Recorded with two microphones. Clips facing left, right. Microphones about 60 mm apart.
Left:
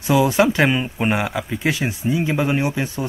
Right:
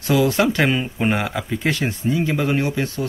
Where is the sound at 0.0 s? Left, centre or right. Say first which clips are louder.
Left 1 dB; centre.